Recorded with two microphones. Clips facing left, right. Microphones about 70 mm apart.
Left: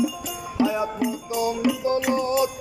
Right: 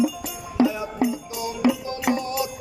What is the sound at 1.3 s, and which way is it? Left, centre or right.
Music, left.